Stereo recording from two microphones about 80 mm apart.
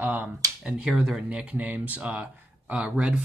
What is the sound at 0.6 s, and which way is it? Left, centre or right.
Speech, centre.